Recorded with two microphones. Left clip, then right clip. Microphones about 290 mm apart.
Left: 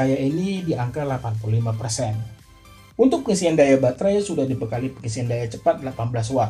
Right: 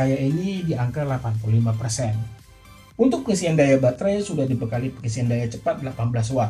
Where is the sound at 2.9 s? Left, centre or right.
Left.